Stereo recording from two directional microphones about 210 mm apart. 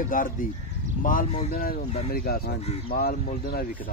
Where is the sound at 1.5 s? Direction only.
45° left (ahead or behind).